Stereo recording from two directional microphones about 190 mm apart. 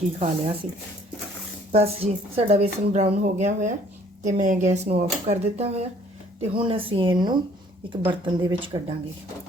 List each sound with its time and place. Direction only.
0.2 s speech: 35° right (ahead or behind)
1.7 s speech: 30° right (ahead or behind)